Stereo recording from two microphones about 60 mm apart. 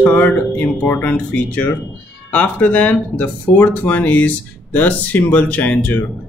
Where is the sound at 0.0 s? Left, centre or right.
Left.